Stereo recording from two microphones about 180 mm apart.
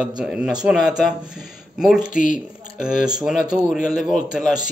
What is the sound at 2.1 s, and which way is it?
Speech, 45° left (ahead or behind).